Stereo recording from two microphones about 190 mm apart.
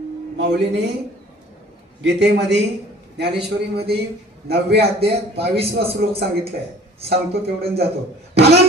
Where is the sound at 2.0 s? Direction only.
65° right (ahead or behind).